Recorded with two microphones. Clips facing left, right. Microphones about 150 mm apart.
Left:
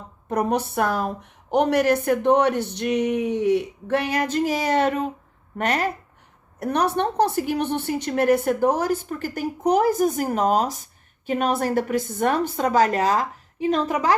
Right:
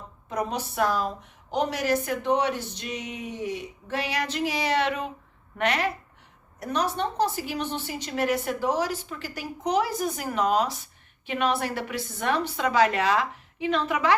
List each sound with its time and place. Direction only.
0.3 s a woman's voice: 60° left (ahead or behind)
6.6 s a woman's voice: 60° left (ahead or behind); by 14.2 s 40° left (ahead or behind)